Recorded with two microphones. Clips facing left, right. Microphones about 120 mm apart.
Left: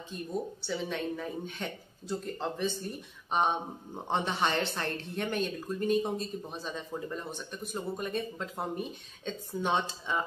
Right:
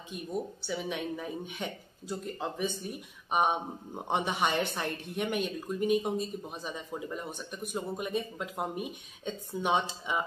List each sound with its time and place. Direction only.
0.7 s speech: 10° right (ahead or behind)